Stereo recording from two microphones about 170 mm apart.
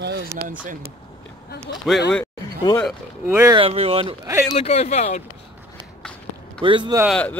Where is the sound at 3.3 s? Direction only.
15° right (ahead or behind).